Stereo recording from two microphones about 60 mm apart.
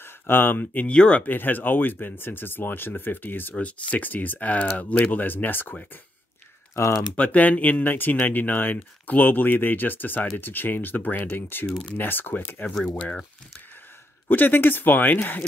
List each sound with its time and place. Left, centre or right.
0.0 s speech: left
0.9 s speech: centre
1.2 s speech: left
3.5 s speech: left
6.7 s speech: left
7.2 s speech: left
12.7 s speech: centre
14.3 s speech: left